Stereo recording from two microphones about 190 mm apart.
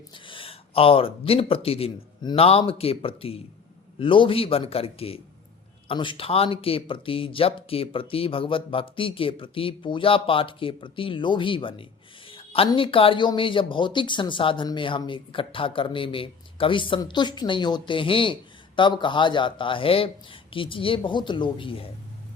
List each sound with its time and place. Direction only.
0.1 s speech: 25° left (ahead or behind)